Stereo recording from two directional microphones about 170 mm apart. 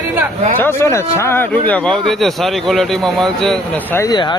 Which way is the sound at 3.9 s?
20° left (ahead or behind).